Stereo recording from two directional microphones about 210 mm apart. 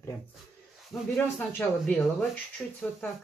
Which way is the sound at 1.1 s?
5° left (ahead or behind).